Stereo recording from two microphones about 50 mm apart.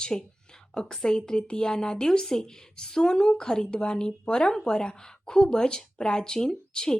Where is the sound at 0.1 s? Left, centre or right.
Centre.